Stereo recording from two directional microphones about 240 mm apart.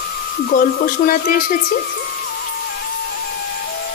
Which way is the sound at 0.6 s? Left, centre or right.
Left.